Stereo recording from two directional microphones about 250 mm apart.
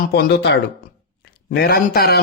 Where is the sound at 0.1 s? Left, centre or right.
Left.